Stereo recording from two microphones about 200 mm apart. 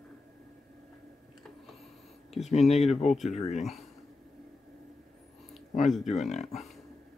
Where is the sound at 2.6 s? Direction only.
Centre (ahead or behind).